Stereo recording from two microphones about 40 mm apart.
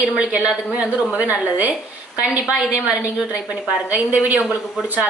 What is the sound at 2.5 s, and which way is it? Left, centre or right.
Speech, right.